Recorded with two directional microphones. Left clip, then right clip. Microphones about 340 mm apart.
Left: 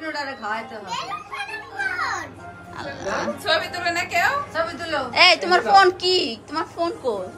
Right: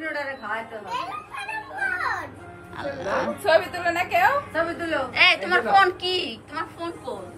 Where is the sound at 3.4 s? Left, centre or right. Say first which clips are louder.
Right 2 dB; right.